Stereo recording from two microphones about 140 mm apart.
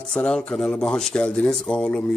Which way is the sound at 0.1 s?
5° left (ahead or behind).